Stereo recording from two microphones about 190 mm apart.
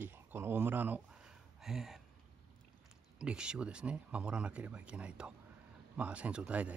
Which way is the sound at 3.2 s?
5° right (ahead or behind).